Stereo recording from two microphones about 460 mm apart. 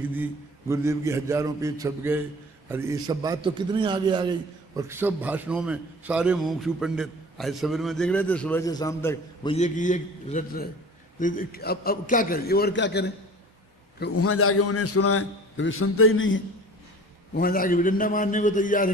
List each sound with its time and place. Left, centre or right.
0.1 s a man's voice: centre